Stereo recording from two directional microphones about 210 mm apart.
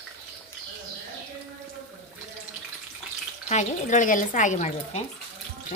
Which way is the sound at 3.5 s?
35° left (ahead or behind).